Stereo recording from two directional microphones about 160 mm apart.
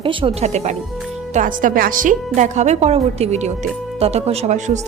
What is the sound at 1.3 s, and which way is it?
A woman's voice, 55° right (ahead or behind).